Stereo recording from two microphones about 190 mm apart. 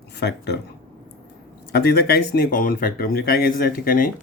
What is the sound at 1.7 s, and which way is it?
Speech, 55° left (ahead or behind).